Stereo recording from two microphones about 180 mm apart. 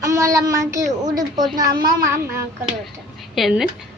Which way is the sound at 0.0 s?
20° right (ahead or behind).